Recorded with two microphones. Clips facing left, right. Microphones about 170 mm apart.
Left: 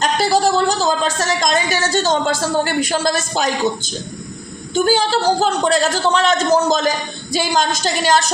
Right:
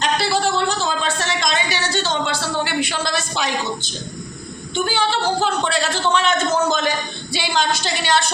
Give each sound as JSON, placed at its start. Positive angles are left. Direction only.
{"t": 0.0, "sound": "speech", "side_deg": 40}
{"t": 4.7, "sound": "a man's voice", "side_deg": 40}